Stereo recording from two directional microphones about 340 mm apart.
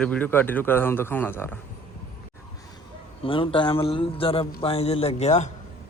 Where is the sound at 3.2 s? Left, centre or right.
Centre.